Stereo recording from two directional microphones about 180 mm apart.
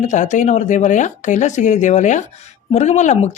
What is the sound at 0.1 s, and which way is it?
Speech, 45° left (ahead or behind).